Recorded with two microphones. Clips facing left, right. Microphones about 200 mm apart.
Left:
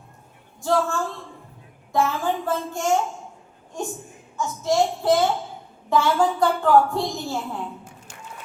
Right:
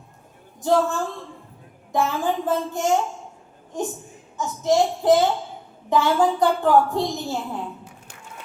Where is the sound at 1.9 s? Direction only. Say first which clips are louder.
Even; 20° right (ahead or behind).